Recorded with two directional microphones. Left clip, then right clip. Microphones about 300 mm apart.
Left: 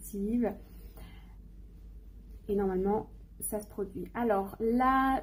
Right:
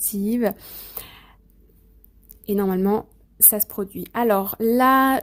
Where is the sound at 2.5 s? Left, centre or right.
Right.